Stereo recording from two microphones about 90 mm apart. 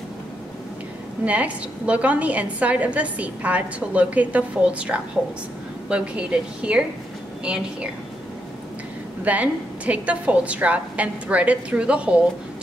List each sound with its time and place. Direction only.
1.2 s a woman's voice: 15° right (ahead or behind)
9.2 s a woman's voice: 15° right (ahead or behind)